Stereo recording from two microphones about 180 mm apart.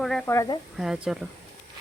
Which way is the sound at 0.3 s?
20° left (ahead or behind).